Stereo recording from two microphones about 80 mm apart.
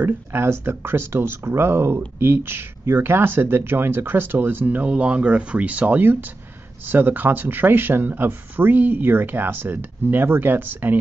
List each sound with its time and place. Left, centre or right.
0.0 s speech: right